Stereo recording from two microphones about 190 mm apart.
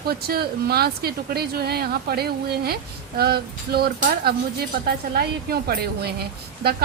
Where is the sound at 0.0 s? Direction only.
55° right (ahead or behind).